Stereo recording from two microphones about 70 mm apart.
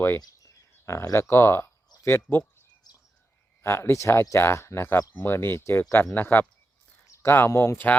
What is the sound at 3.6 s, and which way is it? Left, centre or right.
Speech, left.